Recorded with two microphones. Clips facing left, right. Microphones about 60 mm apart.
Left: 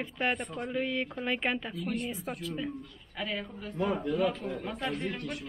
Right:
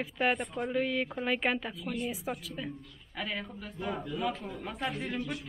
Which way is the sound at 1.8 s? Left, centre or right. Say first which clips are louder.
Left 2 dB; left.